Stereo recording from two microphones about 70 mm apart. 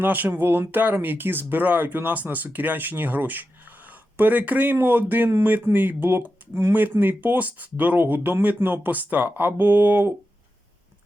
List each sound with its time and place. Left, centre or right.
0.0 s speech: right